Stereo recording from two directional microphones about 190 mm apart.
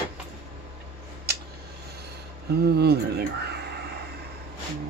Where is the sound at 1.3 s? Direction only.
55° right (ahead or behind).